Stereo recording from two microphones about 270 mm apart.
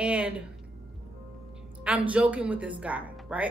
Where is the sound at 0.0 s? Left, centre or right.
Centre.